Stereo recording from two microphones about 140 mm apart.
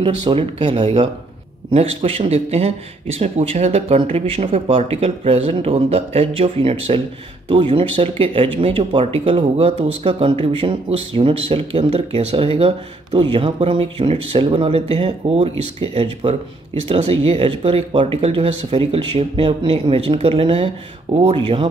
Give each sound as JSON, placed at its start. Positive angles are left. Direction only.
{"t": 0.0, "sound": "speech", "side_deg": -40}